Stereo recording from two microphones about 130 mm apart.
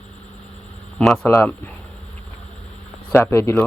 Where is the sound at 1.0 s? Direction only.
5° left (ahead or behind).